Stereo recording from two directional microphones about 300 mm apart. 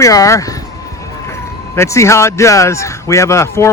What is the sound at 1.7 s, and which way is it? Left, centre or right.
A man's voice, centre.